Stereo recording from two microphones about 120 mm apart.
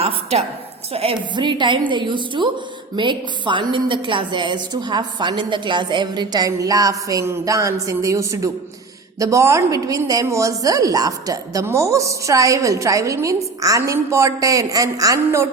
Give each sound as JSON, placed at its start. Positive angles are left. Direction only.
{"t": 0.0, "sound": "a woman's voice", "side_deg": -60}
{"t": 0.9, "sound": "a woman's voice", "side_deg": -50}